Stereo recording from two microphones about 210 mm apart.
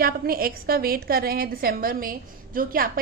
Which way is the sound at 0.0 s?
45° right (ahead or behind).